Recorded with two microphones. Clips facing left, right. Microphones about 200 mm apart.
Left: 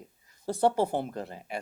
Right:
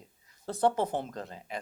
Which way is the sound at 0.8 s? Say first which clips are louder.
Left 3 dB; 10° left (ahead or behind).